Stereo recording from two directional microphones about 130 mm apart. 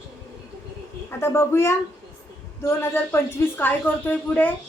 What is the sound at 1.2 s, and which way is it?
A woman's voice, 20° left (ahead or behind).